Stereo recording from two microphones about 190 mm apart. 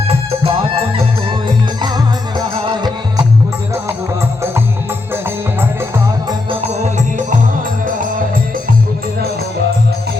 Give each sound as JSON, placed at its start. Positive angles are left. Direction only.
{"t": 0.1, "sound": "music", "side_deg": -30}
{"t": 6.5, "sound": "music", "side_deg": -30}